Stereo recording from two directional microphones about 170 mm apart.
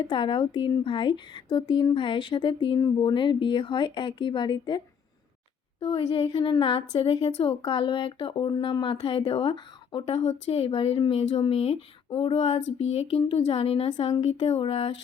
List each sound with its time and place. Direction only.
0.0 s speech: 30° left (ahead or behind)
5.8 s a woman's voice: 35° left (ahead or behind)